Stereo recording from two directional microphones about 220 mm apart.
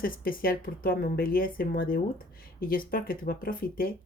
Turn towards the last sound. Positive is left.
turn(degrees=40)  # may be behind; listen again after turning